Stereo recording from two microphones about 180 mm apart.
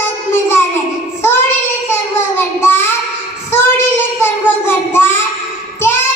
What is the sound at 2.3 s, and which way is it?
Child singing, 10° left (ahead or behind).